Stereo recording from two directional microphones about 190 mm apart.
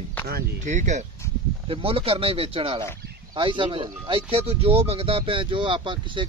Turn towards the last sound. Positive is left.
turn(degrees=-25)  # may be behind; listen again after turning